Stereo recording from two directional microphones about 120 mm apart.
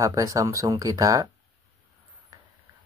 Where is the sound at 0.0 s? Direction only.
25° right (ahead or behind).